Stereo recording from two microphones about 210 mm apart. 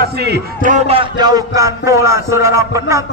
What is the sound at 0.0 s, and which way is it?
A man's voice, 50° right (ahead or behind).